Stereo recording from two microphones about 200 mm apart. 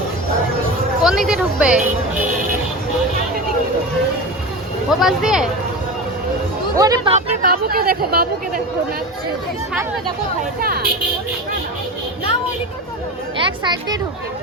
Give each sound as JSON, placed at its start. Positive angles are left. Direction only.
{"t": 1.0, "sound": "a woman's voice", "side_deg": 0}
{"t": 1.8, "sound": "speech", "side_deg": -40}
{"t": 4.9, "sound": "a woman's voice", "side_deg": 0}
{"t": 6.7, "sound": "speech", "side_deg": -20}
{"t": 7.4, "sound": "speech", "side_deg": -45}
{"t": 10.6, "sound": "speech", "side_deg": -50}
{"t": 13.4, "sound": "speech", "side_deg": -20}